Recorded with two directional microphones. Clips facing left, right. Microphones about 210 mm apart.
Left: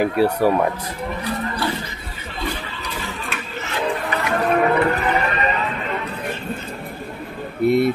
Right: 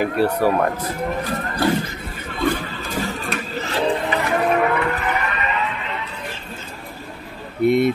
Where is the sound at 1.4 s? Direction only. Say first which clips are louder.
Right 4 dB; 45° right (ahead or behind).